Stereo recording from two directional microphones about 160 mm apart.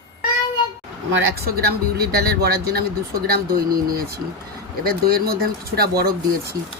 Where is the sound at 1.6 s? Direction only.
80° right.